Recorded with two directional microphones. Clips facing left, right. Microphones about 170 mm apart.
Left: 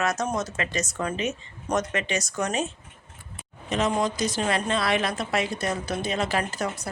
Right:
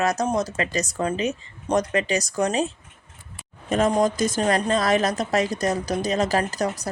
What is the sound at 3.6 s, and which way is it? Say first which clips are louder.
A woman's voice: right 5 dB; 50° right (ahead or behind).